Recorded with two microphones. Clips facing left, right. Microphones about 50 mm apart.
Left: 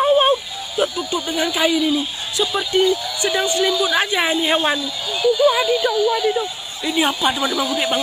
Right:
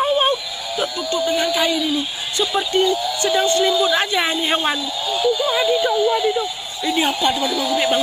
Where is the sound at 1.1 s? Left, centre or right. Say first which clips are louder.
Right 2 dB; centre.